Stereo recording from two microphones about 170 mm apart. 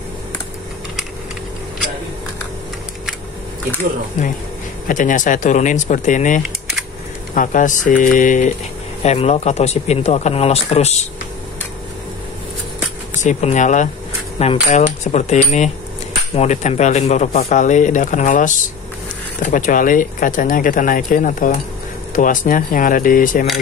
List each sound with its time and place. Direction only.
4.2 s speech: 50° left (ahead or behind)
13.2 s speech: 45° left (ahead or behind)
19.5 s speech: 50° left (ahead or behind)